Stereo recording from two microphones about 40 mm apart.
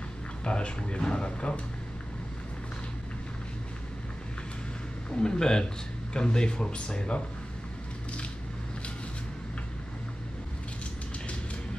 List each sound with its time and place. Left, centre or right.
0.4 s speech: left
5.1 s speech: centre